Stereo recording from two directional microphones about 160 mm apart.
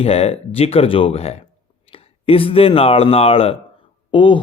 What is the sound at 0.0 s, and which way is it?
Speech, 40° left (ahead or behind).